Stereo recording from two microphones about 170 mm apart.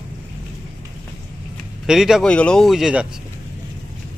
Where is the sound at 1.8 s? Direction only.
Centre (ahead or behind).